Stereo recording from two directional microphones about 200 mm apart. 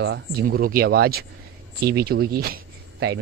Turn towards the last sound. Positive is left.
turn(degrees=-60)  # may be behind; listen again after turning